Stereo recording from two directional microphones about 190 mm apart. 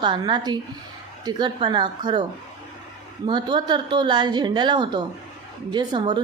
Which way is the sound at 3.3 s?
25° right (ahead or behind).